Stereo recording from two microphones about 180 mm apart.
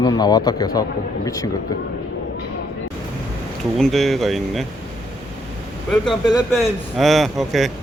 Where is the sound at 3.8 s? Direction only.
Centre (ahead or behind).